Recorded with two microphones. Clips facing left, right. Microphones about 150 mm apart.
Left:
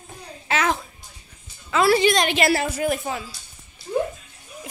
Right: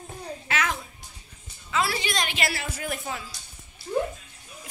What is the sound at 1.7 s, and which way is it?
Speech, 65° left (ahead or behind).